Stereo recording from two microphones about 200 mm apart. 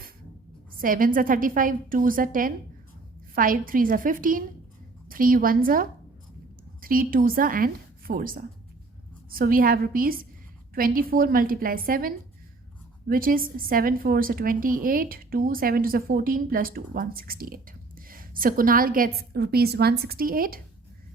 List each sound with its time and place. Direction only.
0.8 s a woman's voice: 45° right (ahead or behind)